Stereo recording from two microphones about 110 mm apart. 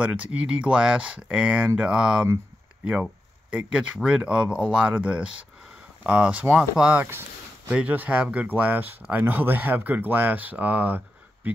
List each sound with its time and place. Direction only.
0.0 s speech: 10° right (ahead or behind)